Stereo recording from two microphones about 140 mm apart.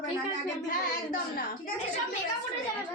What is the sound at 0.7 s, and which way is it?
Child singing, 90° left.